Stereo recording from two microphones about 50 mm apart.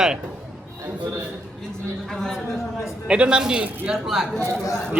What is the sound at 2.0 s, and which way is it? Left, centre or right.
Speech, centre.